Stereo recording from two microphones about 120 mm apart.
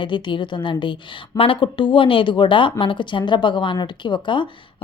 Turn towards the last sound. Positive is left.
turn(degrees=40)  # may be behind; listen again after turning